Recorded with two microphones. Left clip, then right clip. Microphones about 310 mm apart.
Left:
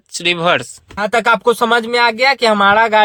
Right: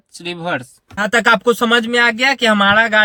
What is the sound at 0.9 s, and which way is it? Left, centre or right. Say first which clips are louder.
Speech: even; left.